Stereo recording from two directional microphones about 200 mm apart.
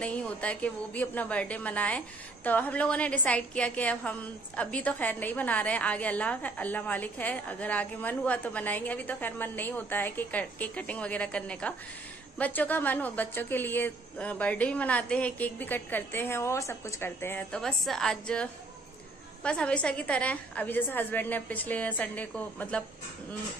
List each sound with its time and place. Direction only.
0.0 s a woman's voice: 5° left (ahead or behind)